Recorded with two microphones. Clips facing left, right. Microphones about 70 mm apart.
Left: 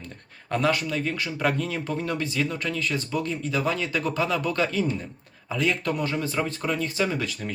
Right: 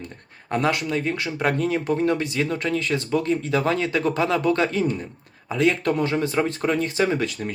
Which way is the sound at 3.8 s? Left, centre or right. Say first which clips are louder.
Right 4 dB; right.